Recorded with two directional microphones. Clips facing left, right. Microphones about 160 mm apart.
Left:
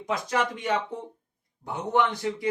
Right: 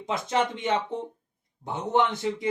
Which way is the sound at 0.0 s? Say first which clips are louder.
Right 1 dB; 25° right (ahead or behind).